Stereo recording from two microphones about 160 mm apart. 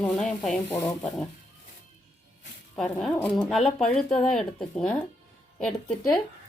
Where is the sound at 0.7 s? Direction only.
15° left (ahead or behind).